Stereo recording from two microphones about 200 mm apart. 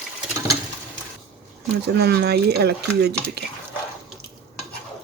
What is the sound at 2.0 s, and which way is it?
Speech, 55° right (ahead or behind).